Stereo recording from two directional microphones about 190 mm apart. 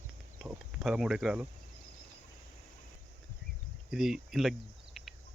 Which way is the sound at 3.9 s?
Centre (ahead or behind).